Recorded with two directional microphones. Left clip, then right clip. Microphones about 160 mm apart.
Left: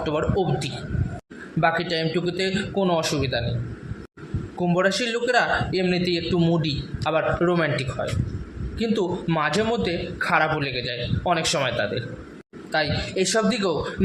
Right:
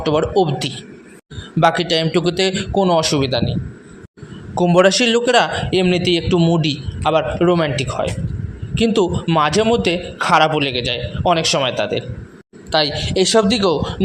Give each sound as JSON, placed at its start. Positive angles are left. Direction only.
{"t": 0.0, "sound": "a man's voice", "side_deg": -45}
{"t": 4.6, "sound": "a man's voice", "side_deg": -50}